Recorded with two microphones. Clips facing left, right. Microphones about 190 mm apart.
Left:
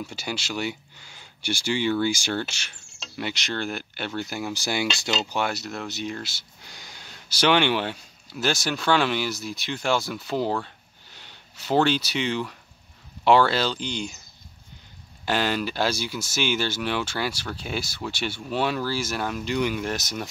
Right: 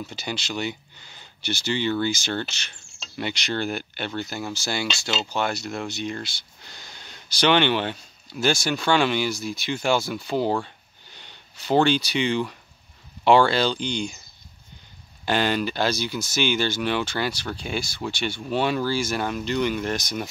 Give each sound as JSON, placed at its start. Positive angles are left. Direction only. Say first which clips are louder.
{"t": 0.0, "sound": "speech", "louder": "even", "side_deg": 10}
{"t": 15.2, "sound": "speech", "louder": "right 2 dB", "side_deg": 5}